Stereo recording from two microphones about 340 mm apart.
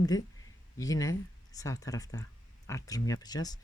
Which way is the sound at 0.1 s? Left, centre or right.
Centre.